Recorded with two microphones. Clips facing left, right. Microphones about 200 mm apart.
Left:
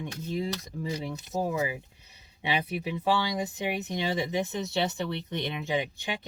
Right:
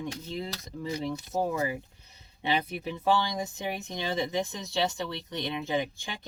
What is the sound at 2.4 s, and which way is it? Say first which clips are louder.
Speech: even; 15° left (ahead or behind).